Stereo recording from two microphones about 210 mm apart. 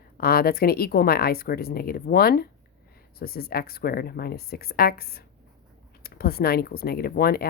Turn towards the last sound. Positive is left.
turn(degrees=45)  # may be behind; listen again after turning